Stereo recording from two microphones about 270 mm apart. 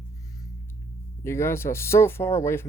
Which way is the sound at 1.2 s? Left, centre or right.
Centre.